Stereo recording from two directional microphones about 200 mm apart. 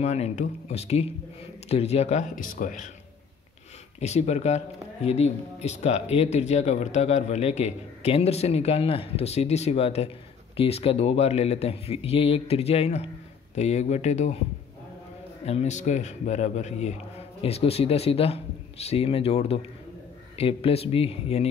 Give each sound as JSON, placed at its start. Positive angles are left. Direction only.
{"t": 0.0, "sound": "speech", "side_deg": 30}
{"t": 4.0, "sound": "speech", "side_deg": 35}
{"t": 15.4, "sound": "speech", "side_deg": 35}